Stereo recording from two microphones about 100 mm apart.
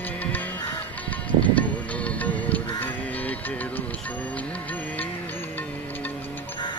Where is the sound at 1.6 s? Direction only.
15° left (ahead or behind).